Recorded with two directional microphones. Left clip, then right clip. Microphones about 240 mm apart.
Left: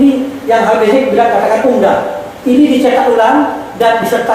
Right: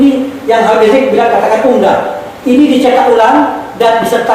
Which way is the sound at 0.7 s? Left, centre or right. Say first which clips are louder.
Right 2 dB; right.